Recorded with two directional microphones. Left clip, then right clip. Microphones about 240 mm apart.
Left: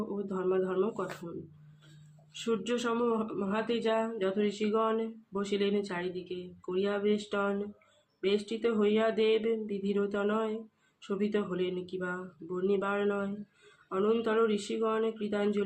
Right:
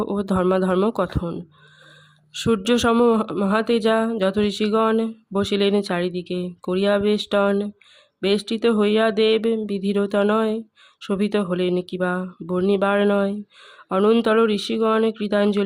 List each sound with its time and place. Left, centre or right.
0.3 s speech: right
2.3 s speech: right